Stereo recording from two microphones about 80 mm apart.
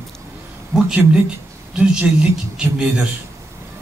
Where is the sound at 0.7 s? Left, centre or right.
Right.